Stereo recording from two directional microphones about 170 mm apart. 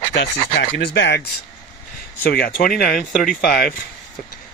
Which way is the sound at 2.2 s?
65° left (ahead or behind).